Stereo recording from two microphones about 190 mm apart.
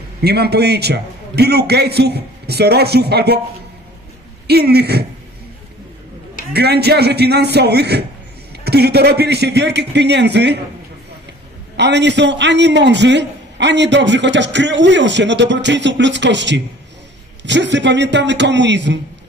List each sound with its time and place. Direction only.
0.2 s a man's voice: 55° right (ahead or behind)
4.5 s a man's voice: 55° right (ahead or behind)
6.5 s a man's voice: 60° right (ahead or behind)
11.7 s a man's voice: 65° right (ahead or behind)